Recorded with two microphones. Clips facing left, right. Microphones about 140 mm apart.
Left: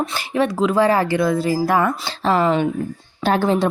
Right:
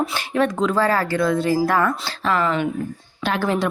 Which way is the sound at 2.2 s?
35° left (ahead or behind).